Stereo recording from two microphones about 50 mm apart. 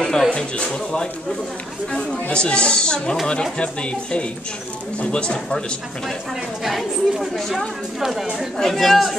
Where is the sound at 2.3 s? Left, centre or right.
Centre.